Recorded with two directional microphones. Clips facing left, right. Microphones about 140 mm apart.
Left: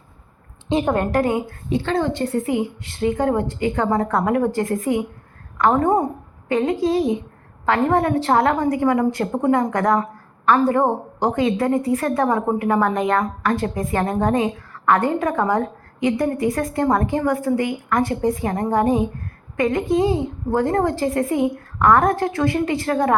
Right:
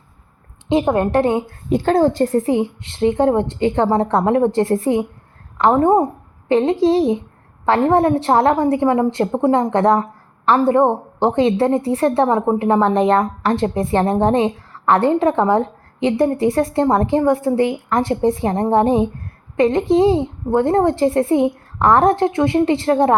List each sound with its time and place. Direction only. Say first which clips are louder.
0.7 s a woman's voice: right 3 dB; 20° right (ahead or behind)
1.7 s a woman's voice: right 6 dB; 45° right (ahead or behind); by 23.1 s 25° right (ahead or behind)